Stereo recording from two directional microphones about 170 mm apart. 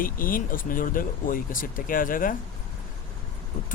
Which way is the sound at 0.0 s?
55° left (ahead or behind).